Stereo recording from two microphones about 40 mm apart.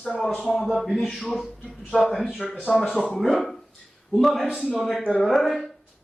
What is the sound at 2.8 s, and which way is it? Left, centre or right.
Speech, centre.